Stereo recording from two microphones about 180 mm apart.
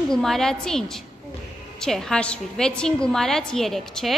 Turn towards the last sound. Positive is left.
turn(degrees=0)  # may be behind; listen again after turning